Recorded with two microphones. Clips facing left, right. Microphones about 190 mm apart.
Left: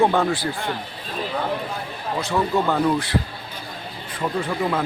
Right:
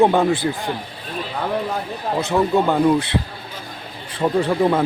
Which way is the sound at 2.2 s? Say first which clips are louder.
Right 4 dB; 20° right (ahead or behind).